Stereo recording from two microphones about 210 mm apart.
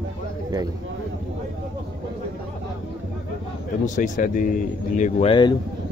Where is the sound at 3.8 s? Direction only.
40° left (ahead or behind).